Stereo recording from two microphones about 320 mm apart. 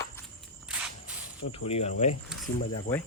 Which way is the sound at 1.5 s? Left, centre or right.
Centre.